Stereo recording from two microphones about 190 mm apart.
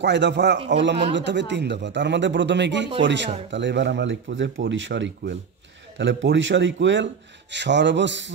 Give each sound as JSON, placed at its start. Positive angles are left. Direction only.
{"t": 0.0, "sound": "speech", "side_deg": -65}